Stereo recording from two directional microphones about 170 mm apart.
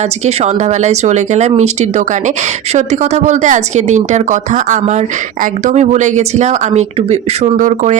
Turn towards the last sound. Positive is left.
turn(degrees=-50)  # may be behind; listen again after turning